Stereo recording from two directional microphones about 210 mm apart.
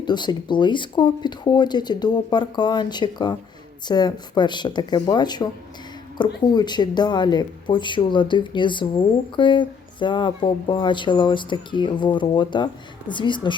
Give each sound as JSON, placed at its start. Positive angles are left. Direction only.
{"t": 0.0, "sound": "speech", "side_deg": 20}